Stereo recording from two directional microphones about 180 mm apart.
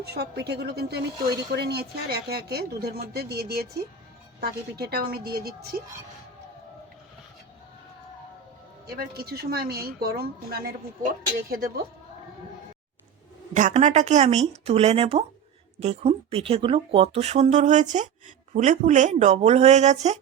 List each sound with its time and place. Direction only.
0.0 s speech: 65° right (ahead or behind)
8.9 s speech: 60° right (ahead or behind)
13.5 s speech: 45° right (ahead or behind)